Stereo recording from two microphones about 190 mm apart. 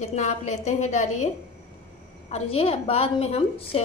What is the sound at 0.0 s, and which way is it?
A woman's voice, 35° left (ahead or behind).